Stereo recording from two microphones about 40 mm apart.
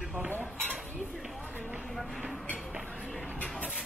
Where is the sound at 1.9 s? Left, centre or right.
Centre.